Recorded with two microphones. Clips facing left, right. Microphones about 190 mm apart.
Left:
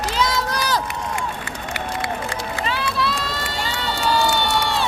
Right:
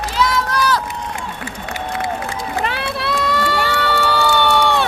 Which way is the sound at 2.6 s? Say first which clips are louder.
Right 1 dB; 60° right (ahead or behind).